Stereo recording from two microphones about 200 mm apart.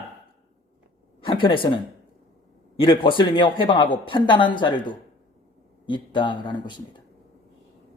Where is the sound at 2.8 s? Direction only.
25° left (ahead or behind).